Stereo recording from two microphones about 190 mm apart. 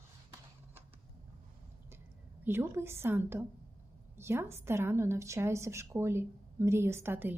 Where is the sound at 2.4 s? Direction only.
10° right (ahead or behind).